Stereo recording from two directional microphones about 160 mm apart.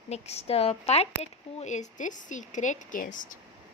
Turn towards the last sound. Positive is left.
turn(degrees=55)  # may be behind; listen again after turning